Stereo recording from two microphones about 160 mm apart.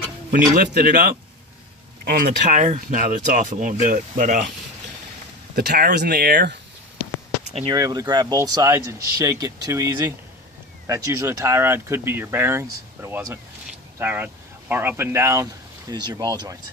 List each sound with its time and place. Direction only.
0.3 s speech: 65° right (ahead or behind)
5.5 s speech: 75° right (ahead or behind); by 6.6 s 90° right
7.7 s speech: 25° right (ahead or behind)